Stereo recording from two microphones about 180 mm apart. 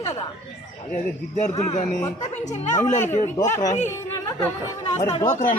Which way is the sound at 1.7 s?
40° left (ahead or behind).